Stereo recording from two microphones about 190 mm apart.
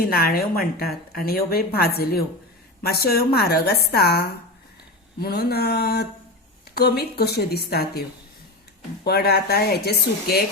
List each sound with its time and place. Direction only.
0.0 s a woman's voice: 50° left (ahead or behind)
9.0 s a woman's voice: 55° left (ahead or behind)